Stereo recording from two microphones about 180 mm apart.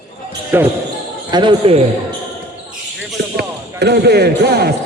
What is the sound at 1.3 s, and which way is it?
Speech, 25° right (ahead or behind).